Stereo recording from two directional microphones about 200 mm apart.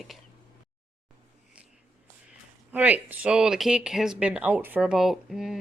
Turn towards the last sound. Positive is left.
turn(degrees=0)  # may be behind; listen again after turning